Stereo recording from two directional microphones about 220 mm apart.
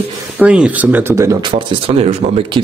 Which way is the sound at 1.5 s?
25° right (ahead or behind).